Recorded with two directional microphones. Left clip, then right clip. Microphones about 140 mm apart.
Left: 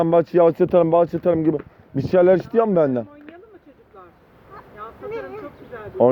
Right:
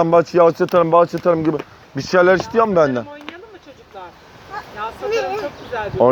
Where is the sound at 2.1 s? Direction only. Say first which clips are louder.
Right 2 dB; 90° left.